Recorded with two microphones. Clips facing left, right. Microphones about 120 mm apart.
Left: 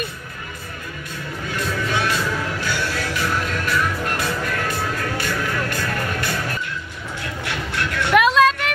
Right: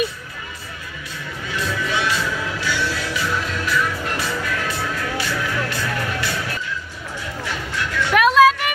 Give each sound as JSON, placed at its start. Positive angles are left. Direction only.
{"t": 1.5, "sound": "music", "side_deg": 50}
{"t": 7.4, "sound": "music", "side_deg": 60}
{"t": 8.4, "sound": "a sound", "side_deg": -5}